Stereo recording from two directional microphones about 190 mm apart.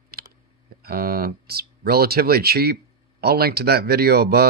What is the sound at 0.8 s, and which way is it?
Speech, 55° right (ahead or behind).